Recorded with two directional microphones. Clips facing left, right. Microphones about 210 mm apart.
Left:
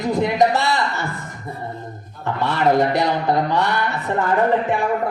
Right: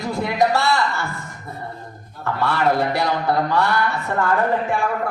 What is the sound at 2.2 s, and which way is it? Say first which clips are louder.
A man's voice: left 1 dB; 20° left (ahead or behind).